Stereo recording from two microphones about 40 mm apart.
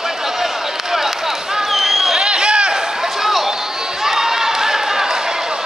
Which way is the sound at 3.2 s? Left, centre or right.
Centre.